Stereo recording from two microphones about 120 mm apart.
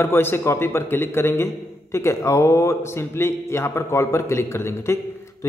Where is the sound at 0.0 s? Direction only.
20° left (ahead or behind).